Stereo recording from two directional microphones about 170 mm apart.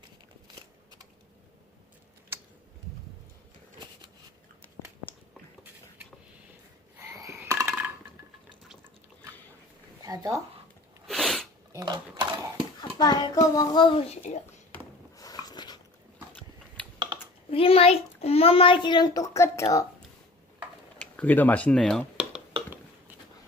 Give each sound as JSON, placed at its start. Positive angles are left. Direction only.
{"t": 0.4, "sound": "shuffling cards", "side_deg": -25}
{"t": 7.0, "sound": "a sound", "side_deg": -20}
{"t": 10.0, "sound": "speech", "side_deg": -20}
{"t": 11.0, "sound": "sneeze", "side_deg": 0}
{"t": 11.7, "sound": "a sound", "side_deg": -20}
{"t": 12.8, "sound": "a child's voice", "side_deg": 25}
{"t": 15.1, "sound": "writing", "side_deg": 20}
{"t": 17.1, "sound": "typing", "side_deg": -25}
{"t": 17.5, "sound": "a child's voice", "side_deg": 35}
{"t": 21.0, "sound": "speech", "side_deg": 10}